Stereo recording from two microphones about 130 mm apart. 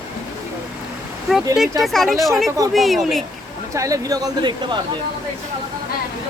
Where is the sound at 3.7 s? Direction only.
25° right (ahead or behind).